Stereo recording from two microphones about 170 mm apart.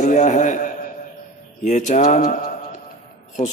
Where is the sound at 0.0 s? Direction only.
45° left (ahead or behind).